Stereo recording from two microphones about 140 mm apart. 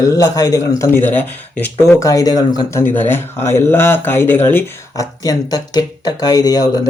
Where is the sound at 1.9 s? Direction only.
25° left (ahead or behind).